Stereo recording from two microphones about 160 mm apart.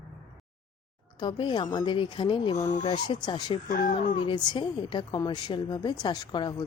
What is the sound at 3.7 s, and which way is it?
Speech, 60° left (ahead or behind).